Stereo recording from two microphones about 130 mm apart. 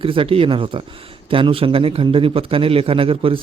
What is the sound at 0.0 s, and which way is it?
Speech, 45° right (ahead or behind).